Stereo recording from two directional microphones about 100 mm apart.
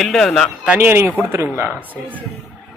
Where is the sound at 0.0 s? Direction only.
5° left (ahead or behind).